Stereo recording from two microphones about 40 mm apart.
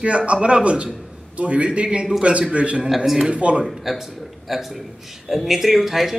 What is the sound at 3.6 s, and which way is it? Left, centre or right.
Speech, centre.